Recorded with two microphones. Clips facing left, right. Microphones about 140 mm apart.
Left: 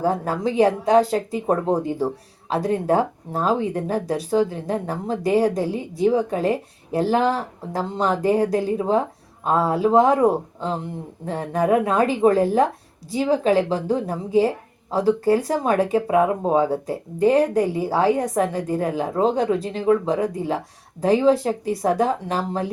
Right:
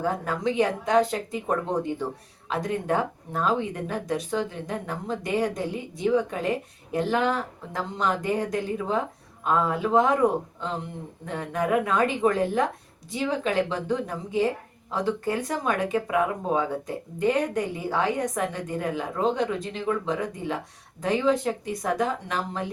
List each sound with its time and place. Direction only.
0.0 s speech: 35° left (ahead or behind)